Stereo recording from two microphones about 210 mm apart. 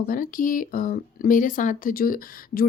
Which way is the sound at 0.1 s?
40° left (ahead or behind).